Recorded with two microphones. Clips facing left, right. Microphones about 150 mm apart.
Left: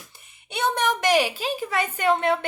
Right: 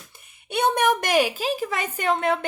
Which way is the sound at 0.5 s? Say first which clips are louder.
Right 3 dB; 55° right (ahead or behind).